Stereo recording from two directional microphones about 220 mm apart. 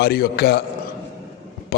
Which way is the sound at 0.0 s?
45° left (ahead or behind).